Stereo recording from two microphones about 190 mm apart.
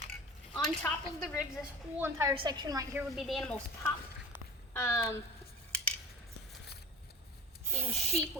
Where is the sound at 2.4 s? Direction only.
20° right (ahead or behind).